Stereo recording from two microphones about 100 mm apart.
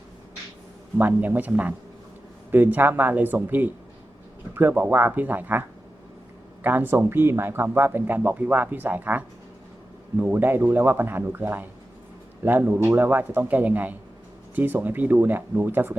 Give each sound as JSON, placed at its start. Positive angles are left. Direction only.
{"t": 0.9, "sound": "speech", "side_deg": -20}